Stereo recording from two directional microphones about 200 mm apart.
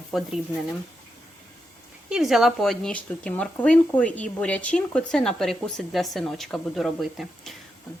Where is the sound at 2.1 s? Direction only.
5° right (ahead or behind).